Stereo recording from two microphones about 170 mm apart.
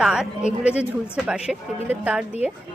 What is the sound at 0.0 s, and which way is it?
Speech, 5° right (ahead or behind).